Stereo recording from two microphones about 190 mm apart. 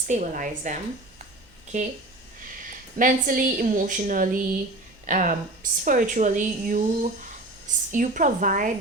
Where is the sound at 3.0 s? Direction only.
45° right (ahead or behind).